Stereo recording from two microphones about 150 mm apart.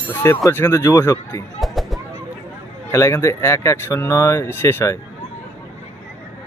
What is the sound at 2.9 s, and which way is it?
Speech, 20° left (ahead or behind).